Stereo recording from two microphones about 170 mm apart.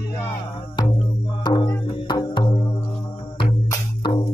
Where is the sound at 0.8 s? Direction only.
25° left (ahead or behind).